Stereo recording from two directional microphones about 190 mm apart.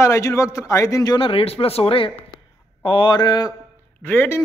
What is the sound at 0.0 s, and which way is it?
A man's voice, 15° left (ahead or behind).